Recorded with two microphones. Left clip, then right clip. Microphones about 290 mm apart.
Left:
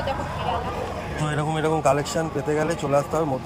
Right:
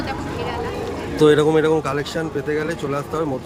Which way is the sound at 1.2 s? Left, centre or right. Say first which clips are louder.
Right 12 dB; centre.